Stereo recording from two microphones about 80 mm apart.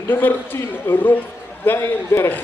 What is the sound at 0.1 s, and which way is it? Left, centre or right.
A man's voice, left.